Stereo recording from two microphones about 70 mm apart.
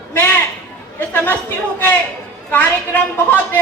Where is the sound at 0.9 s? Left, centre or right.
Left.